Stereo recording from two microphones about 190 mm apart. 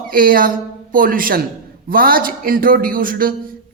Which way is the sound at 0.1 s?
50° right (ahead or behind).